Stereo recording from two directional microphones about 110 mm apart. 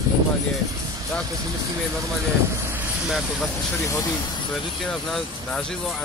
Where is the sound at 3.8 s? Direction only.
30° left (ahead or behind).